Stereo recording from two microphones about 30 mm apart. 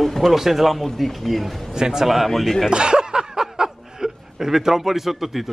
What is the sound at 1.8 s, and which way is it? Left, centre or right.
Speech, right.